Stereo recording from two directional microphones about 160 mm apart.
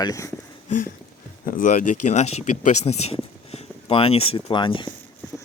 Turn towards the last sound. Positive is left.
turn(degrees=30)  # may be behind; listen again after turning